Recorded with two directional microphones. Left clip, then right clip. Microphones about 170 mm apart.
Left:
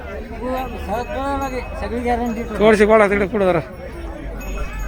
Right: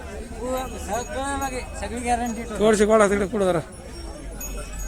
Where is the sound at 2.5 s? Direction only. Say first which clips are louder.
Left 5 dB; 25° right (ahead or behind).